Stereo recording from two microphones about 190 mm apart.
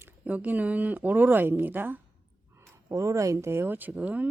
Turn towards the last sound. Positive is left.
turn(degrees=-5)  # may be behind; listen again after turning